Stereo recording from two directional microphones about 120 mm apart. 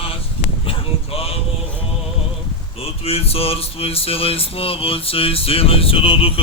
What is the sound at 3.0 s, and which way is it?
Music, 55° left (ahead or behind).